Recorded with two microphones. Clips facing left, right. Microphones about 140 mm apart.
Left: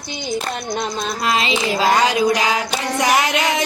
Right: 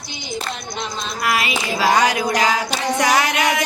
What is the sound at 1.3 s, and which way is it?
Child singing, 25° left (ahead or behind).